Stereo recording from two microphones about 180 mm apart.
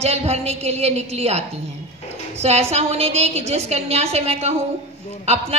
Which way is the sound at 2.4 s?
35° right (ahead or behind).